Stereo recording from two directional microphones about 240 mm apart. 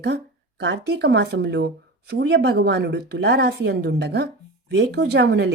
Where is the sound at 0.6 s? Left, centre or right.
Right.